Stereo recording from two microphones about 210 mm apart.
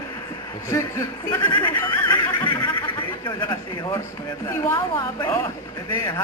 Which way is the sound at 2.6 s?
20° left (ahead or behind).